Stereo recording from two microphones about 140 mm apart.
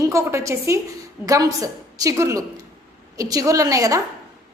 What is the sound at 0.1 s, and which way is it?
A woman's voice, 20° right (ahead or behind).